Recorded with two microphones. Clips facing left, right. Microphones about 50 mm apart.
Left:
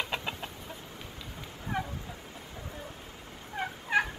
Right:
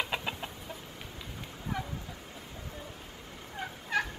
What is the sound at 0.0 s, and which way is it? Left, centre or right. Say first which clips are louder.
Chicken: even; centre.